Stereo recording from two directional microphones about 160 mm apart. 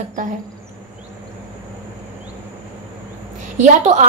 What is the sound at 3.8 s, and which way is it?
Speech, 45° right (ahead or behind).